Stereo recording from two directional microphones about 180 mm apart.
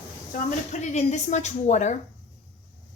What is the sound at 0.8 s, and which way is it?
Speech, 40° left (ahead or behind).